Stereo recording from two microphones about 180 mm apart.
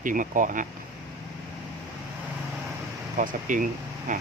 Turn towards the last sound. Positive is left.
turn(degrees=-45)  # may be behind; listen again after turning